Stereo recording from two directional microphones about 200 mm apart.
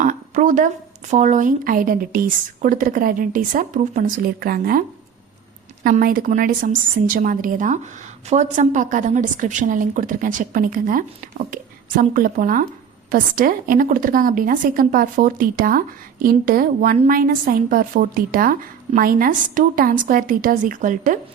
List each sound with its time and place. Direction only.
0.0 s a sound: 40° right (ahead or behind)
1.1 s a woman's voice: 35° right (ahead or behind)
5.8 s a woman's voice: 45° right (ahead or behind)